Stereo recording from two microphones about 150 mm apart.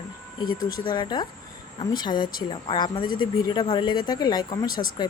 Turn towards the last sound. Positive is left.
turn(degrees=25)  # may be behind; listen again after turning